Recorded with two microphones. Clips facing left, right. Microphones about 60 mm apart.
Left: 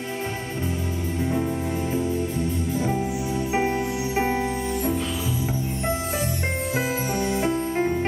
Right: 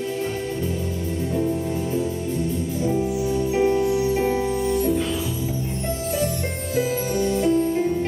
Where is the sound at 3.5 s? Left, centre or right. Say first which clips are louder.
Right 5 dB; left.